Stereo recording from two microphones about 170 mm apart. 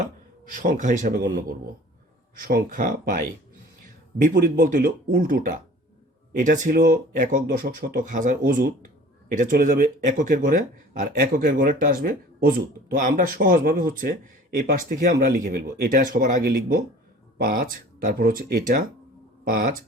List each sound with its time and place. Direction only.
0.0 s speech: 50° right (ahead or behind)
2.3 s speech: 60° right (ahead or behind)
4.2 s speech: 50° right (ahead or behind)